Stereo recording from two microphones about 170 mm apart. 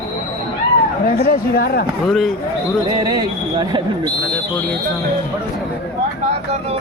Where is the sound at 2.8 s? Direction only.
25° right (ahead or behind).